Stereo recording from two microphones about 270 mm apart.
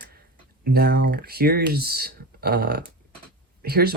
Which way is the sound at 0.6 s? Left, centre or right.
Right.